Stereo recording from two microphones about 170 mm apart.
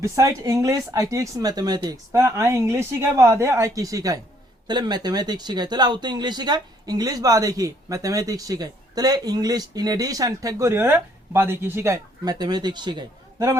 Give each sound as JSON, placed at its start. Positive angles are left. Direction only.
{"t": 0.0, "sound": "speech", "side_deg": -20}